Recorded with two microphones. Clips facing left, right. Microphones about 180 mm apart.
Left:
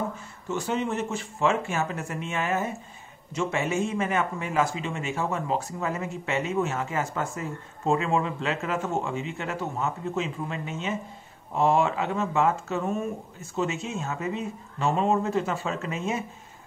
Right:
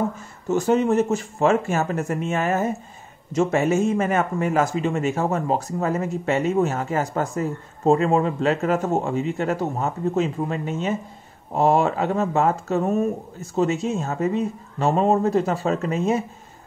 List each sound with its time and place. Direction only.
0.5 s speech: 45° right (ahead or behind)